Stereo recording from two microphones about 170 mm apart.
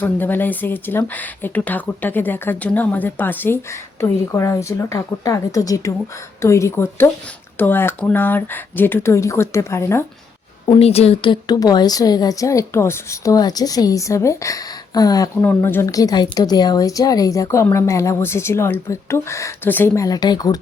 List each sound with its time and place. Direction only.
0.0 s a woman's voice: 10° left (ahead or behind)
10.7 s a woman's voice: 35° left (ahead or behind)